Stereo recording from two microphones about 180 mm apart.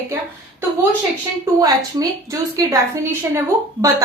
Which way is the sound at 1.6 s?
20° right (ahead or behind).